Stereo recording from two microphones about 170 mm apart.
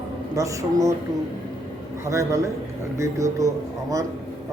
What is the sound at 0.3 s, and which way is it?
Speech, 20° right (ahead or behind).